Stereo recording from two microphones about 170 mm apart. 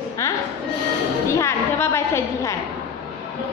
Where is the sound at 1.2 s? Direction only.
15° left (ahead or behind).